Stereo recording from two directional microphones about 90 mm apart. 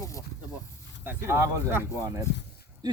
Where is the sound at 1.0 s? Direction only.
30° right (ahead or behind).